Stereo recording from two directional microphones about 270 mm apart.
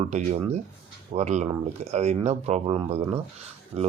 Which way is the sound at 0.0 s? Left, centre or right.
Right.